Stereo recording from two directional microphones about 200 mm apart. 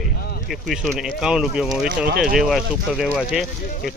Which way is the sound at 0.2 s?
50° left (ahead or behind).